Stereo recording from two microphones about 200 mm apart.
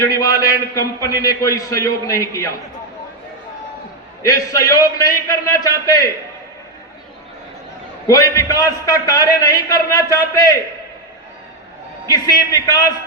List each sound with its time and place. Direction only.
0.0 s a man's voice: 15° left (ahead or behind)
4.2 s a man's voice: 15° left (ahead or behind)
8.0 s a man's voice: 15° left (ahead or behind)
12.0 s a man's voice: 20° left (ahead or behind)